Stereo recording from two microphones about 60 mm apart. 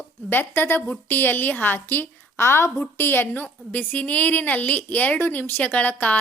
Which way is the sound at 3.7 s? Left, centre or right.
Left.